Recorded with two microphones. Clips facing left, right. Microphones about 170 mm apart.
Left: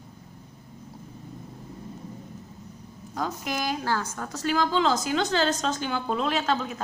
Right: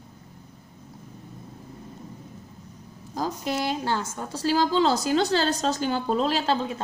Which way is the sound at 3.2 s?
30° right (ahead or behind).